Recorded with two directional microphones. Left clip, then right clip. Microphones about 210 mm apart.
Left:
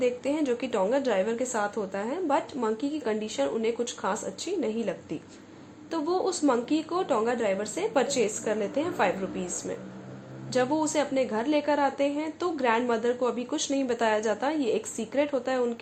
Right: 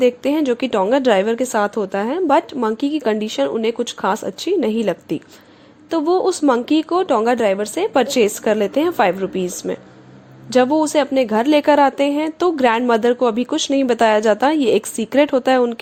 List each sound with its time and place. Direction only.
0.0 s a woman's voice: 45° right (ahead or behind)